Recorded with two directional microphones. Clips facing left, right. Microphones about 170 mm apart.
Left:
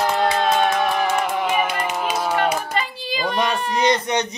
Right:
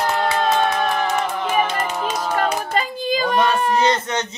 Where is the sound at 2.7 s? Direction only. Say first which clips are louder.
Right 4 dB; 45° right (ahead or behind).